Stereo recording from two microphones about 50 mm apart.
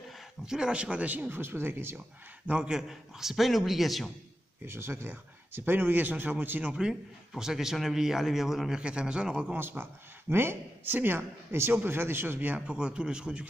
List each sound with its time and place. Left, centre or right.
0.5 s speech: centre
1.3 s speech: right
2.6 s a man's voice: centre
4.6 s speech: right
5.1 s speech: right
6.7 s a man's voice: centre
8.7 s speech: centre
9.6 s speech: right
12.5 s a man's voice: centre